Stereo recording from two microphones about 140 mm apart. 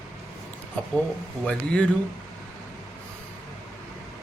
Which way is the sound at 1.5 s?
5° left (ahead or behind).